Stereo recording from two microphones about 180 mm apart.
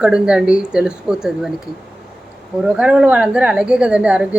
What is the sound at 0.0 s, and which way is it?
Speech, 5° right (ahead or behind).